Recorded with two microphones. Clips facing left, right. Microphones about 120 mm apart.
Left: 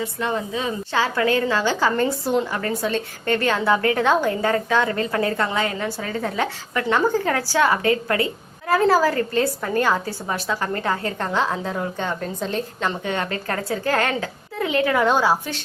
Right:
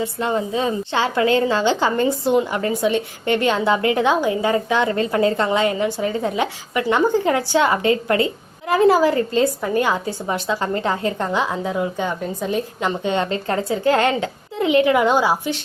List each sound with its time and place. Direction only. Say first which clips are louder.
0.0 s a woman's voice: right 3 dB; 25° right (ahead or behind)